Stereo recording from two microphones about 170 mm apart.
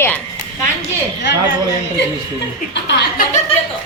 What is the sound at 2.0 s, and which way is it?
Speech, 90° left.